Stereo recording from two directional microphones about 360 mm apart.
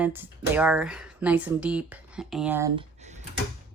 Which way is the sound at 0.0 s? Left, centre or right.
Centre.